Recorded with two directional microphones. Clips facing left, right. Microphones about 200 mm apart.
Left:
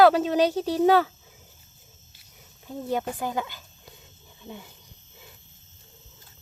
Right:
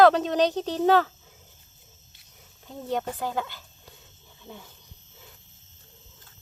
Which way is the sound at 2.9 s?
10° left (ahead or behind).